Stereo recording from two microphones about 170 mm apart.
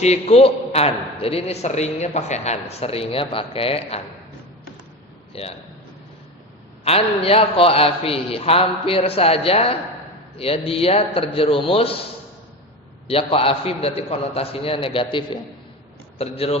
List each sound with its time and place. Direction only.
0.0 s a man's voice: 40° left (ahead or behind)
5.3 s a man's voice: 35° left (ahead or behind)
6.8 s a man's voice: 35° left (ahead or behind)
13.1 s a man's voice: 35° left (ahead or behind)